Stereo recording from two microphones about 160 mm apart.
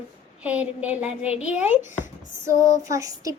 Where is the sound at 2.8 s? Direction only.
20° right (ahead or behind).